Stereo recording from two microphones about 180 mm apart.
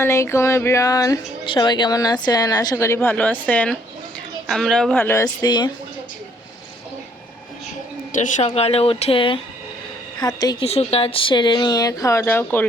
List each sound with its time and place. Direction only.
0.0 s a woman's voice: 15° left (ahead or behind)
8.4 s speech: 35° left (ahead or behind)
10.7 s speech: 35° left (ahead or behind); by 12.6 s 10° left (ahead or behind)